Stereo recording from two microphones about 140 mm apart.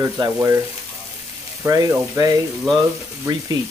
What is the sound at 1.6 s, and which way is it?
Speech, 25° right (ahead or behind).